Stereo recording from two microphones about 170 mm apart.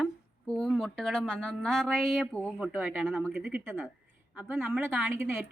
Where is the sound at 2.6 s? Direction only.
5° right (ahead or behind).